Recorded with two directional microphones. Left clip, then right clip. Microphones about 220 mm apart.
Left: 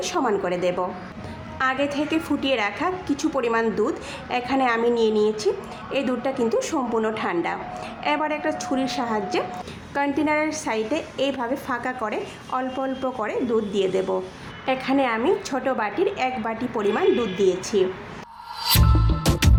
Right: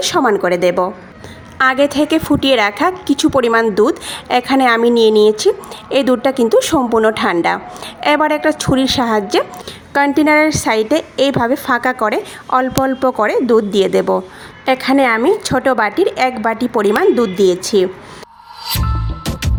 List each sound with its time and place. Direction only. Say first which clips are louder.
0.0 s a woman's voice: right 10 dB; 35° right (ahead or behind)
18.6 s music: even; centre (ahead or behind)